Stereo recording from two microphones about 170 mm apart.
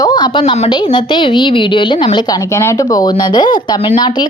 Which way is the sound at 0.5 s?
35° left (ahead or behind).